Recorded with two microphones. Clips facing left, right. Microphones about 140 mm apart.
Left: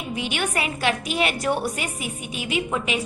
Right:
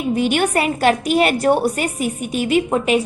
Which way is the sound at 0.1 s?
45° right (ahead or behind).